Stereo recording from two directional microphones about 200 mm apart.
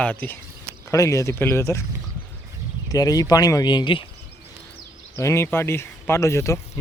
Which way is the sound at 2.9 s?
20° left (ahead or behind).